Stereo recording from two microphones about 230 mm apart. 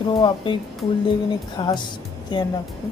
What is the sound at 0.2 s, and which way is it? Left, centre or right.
A woman's voice, left.